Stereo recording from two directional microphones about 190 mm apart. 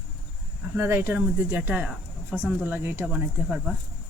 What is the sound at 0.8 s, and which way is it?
Speech, 10° right (ahead or behind).